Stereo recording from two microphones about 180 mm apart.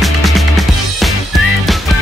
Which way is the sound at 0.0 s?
Centre (ahead or behind).